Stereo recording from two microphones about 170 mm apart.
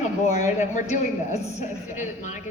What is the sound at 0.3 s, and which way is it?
A woman's voice, 45° left (ahead or behind).